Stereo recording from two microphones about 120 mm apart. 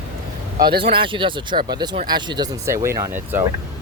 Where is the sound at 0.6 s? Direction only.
45° right (ahead or behind).